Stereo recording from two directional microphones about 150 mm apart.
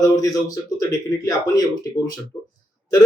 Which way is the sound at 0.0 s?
25° left (ahead or behind).